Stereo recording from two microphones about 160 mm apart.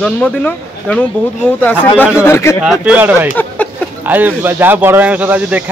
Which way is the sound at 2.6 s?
5° right (ahead or behind).